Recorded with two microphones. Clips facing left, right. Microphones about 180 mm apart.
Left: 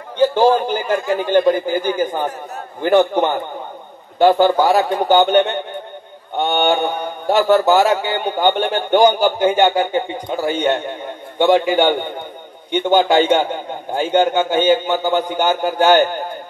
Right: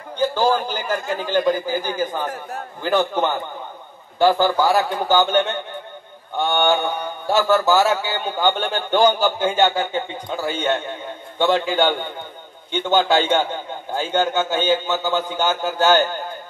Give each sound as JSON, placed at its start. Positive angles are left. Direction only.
{"t": 0.3, "sound": "a man's voice", "side_deg": 20}